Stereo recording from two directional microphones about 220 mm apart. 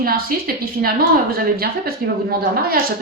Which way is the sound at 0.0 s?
40° right (ahead or behind).